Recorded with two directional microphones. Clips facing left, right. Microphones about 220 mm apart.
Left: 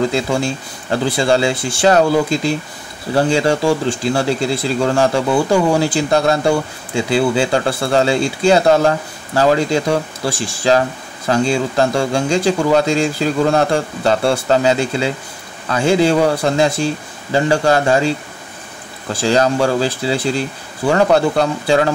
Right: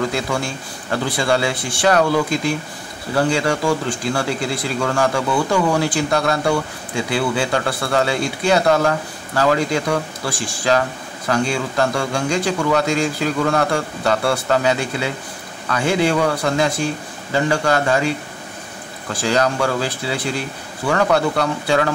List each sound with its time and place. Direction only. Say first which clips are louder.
0.0 s speech: left 5 dB; 25° left (ahead or behind)